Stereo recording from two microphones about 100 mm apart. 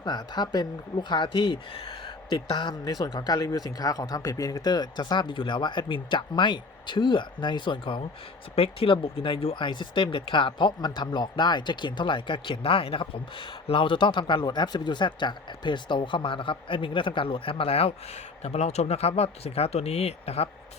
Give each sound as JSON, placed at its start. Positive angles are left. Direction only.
{"t": 0.0, "sound": "speech", "side_deg": 45}
{"t": 8.5, "sound": "speech", "side_deg": 70}